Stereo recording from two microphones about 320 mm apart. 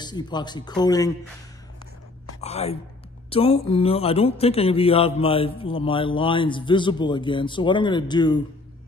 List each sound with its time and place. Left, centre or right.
0.0 s speech: centre
2.4 s speech: centre